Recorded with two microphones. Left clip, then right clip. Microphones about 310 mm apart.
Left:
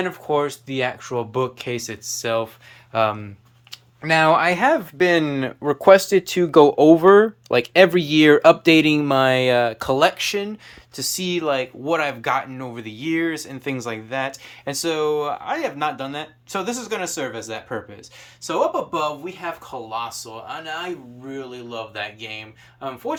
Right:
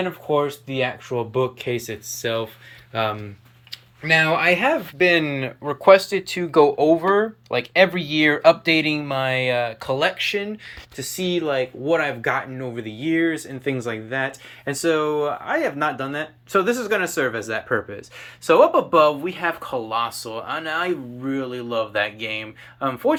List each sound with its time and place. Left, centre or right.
0.0 s speech: centre